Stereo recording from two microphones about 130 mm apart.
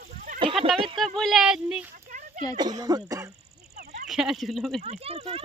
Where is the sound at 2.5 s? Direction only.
30° right (ahead or behind).